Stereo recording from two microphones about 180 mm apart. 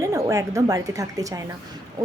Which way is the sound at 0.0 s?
15° right (ahead or behind).